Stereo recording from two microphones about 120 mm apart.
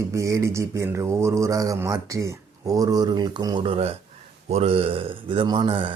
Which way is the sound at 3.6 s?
50° right (ahead or behind).